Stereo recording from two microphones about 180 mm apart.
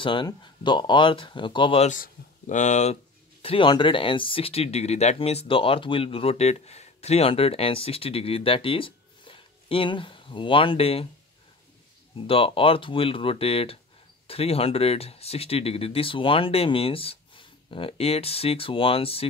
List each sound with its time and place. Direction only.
0.0 s speech: 25° left (ahead or behind)
1.9 s speech: 45° left (ahead or behind)
3.4 s speech: 25° left (ahead or behind)
12.3 s speech: 30° left (ahead or behind)